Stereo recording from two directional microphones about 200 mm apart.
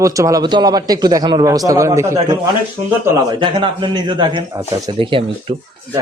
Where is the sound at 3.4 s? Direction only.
25° right (ahead or behind).